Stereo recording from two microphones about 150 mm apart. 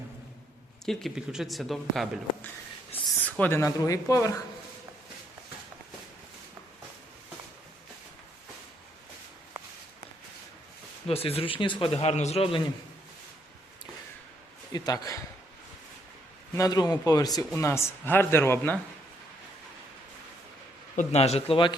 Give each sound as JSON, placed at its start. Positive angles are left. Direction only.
{"t": 0.9, "sound": "speech", "side_deg": 0}
{"t": 11.1, "sound": "a man's voice", "side_deg": 40}
{"t": 14.7, "sound": "a man's voice", "side_deg": 25}
{"t": 16.6, "sound": "speech", "side_deg": 25}
{"t": 20.9, "sound": "speech", "side_deg": 50}